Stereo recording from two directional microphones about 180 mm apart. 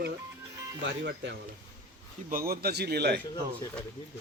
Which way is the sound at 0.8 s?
75° right (ahead or behind).